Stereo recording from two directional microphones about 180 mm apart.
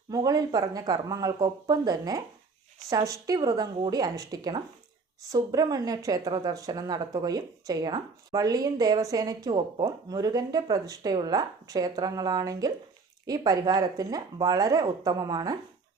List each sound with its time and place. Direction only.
0.1 s speech: 20° right (ahead or behind)